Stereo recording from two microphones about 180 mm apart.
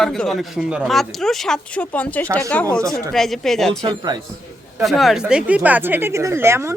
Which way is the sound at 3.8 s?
25° right (ahead or behind).